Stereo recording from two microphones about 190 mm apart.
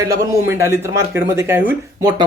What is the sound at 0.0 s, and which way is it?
Speech, 15° right (ahead or behind).